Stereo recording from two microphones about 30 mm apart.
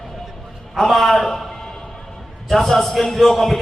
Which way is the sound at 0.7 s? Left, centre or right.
Centre.